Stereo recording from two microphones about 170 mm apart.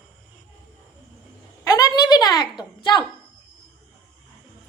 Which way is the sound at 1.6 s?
20° left (ahead or behind).